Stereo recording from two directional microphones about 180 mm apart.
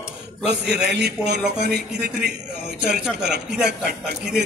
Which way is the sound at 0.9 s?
70° right (ahead or behind).